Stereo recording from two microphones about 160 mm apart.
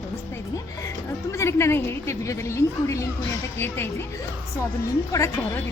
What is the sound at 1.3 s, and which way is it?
A woman's voice, 15° left (ahead or behind).